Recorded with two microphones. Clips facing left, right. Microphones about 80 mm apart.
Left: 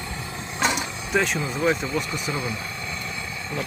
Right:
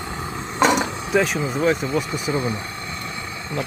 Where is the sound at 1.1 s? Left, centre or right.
Centre.